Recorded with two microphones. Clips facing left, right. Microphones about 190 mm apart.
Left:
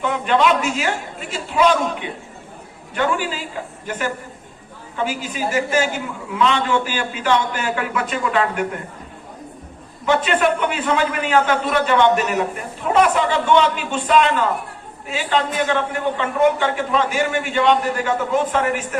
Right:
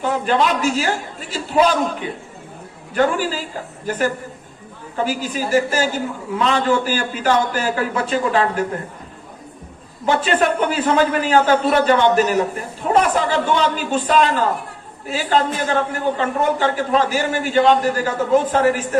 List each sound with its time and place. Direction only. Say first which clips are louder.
0.0 s a man's voice: even; 35° right (ahead or behind)
10.1 s a man's voice: even; 35° right (ahead or behind)